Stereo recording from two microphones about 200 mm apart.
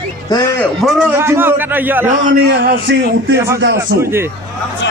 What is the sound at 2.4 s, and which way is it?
Speech, 60° right (ahead or behind).